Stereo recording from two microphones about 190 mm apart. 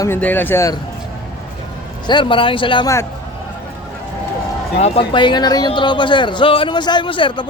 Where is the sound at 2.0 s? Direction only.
25° left (ahead or behind).